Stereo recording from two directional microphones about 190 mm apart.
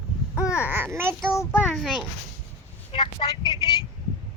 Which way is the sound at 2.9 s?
30° left (ahead or behind).